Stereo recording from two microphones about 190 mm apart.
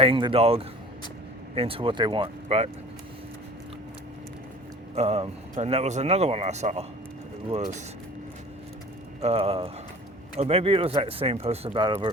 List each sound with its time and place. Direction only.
0.0 s speech: 30° right (ahead or behind)
4.9 s speech: 35° right (ahead or behind)
9.2 s speech: 30° right (ahead or behind)